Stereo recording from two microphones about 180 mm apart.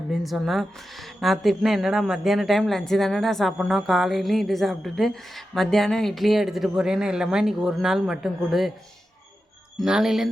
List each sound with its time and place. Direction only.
0.1 s a woman's voice: centre (ahead or behind)
9.7 s a woman's voice: centre (ahead or behind)